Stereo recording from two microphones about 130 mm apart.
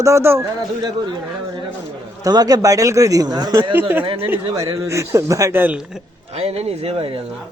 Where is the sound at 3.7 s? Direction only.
15° right (ahead or behind).